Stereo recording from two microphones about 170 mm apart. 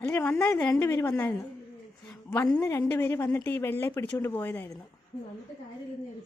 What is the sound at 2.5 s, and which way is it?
Speech, 15° left (ahead or behind).